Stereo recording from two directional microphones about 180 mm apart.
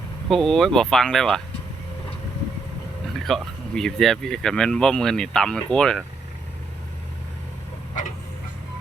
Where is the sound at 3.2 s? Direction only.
Centre (ahead or behind).